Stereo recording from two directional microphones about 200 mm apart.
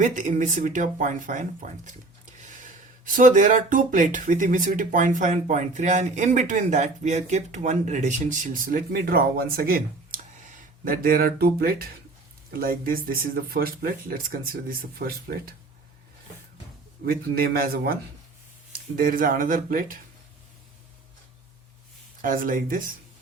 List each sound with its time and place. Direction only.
0.0 s speech: 40° right (ahead or behind)
17.1 s speech: 50° right (ahead or behind)
22.2 s speech: 45° right (ahead or behind)